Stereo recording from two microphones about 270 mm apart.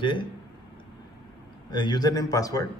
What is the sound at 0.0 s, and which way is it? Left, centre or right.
Speech, centre.